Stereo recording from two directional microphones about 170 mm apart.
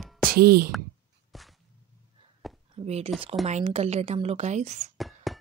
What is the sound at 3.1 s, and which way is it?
Speech, centre (ahead or behind).